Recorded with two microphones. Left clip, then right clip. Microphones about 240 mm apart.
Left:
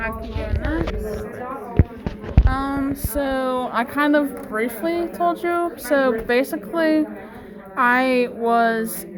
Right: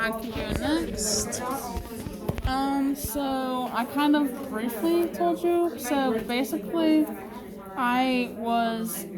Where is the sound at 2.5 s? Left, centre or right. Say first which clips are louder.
Left 2 dB; centre.